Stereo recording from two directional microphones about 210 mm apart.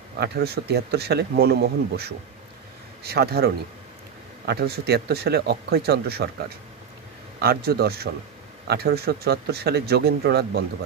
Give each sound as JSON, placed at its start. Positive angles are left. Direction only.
{"t": 0.2, "sound": "speech", "side_deg": -50}
{"t": 7.3, "sound": "speech", "side_deg": -45}